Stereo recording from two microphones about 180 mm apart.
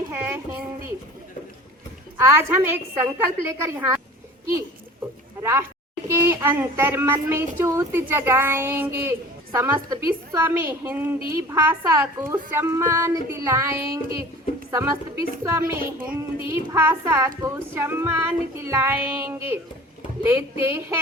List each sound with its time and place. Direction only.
0.1 s a sound: 10° right (ahead or behind)
2.1 s speech: 15° right (ahead or behind)
5.4 s speech: 15° right (ahead or behind)